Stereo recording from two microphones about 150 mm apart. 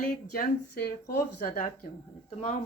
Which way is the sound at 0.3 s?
85° left.